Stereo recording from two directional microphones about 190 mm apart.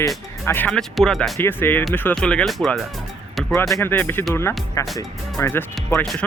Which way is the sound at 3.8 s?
10° left (ahead or behind).